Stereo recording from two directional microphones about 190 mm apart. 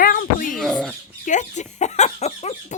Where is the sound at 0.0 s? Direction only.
50° left (ahead or behind).